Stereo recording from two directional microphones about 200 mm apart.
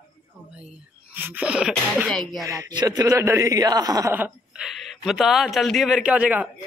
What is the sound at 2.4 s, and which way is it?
A man's voice, 15° right (ahead or behind).